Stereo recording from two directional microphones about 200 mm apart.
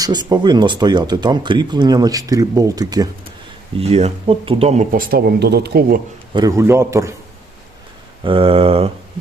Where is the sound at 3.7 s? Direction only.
30° right (ahead or behind); by 6.0 s 45° right (ahead or behind).